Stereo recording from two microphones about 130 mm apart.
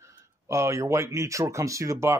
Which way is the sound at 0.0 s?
20° right (ahead or behind).